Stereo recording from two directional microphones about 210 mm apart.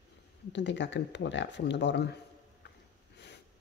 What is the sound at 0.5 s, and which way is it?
Speech, 60° left (ahead or behind).